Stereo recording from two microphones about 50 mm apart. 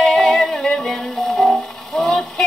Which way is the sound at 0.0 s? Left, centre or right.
Centre.